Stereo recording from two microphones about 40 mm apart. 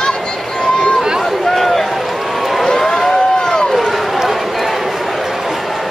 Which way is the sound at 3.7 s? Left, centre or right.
Centre.